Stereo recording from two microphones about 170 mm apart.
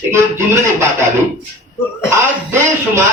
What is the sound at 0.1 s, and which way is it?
Speech, 15° right (ahead or behind).